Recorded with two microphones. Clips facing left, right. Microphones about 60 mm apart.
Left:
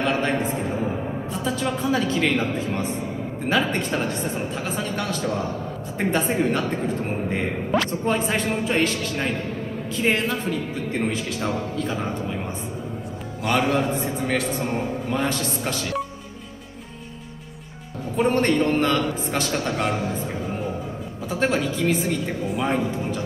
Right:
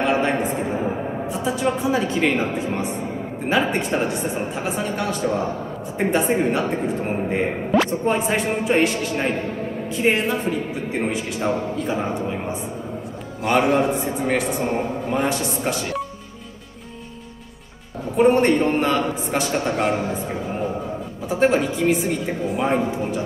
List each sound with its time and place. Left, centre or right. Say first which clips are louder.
0.0 s a sound: right 3 dB; centre
2.5 s a man's voice: right 1 dB; centre
6.3 s a man's voice: right 2 dB; centre
13.6 s a man's voice: right 4 dB; centre
18.1 s a man's voice: right 4 dB; centre
21.3 s a man's voice: right 4 dB; centre
22.8 s a man's voice: right 3 dB; centre